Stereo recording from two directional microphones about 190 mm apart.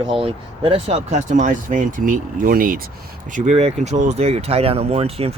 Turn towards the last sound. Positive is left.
turn(degrees=-30)  # may be behind; listen again after turning